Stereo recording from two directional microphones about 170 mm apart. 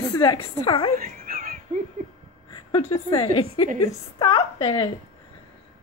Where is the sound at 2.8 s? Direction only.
25° left (ahead or behind).